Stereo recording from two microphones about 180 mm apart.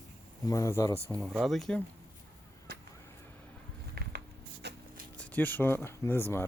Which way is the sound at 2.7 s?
60° right (ahead or behind).